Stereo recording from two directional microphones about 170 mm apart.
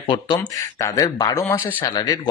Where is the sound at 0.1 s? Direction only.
25° left (ahead or behind).